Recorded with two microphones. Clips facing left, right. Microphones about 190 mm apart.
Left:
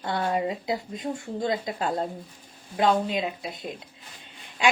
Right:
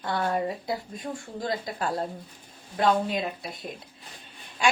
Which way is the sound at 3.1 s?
20° left (ahead or behind).